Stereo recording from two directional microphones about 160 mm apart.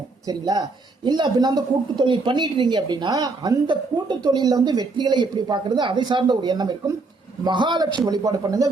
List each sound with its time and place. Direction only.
0.3 s speech: 25° right (ahead or behind)